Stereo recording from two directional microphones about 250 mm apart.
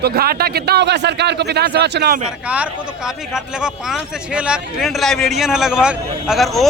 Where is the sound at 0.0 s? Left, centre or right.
Right.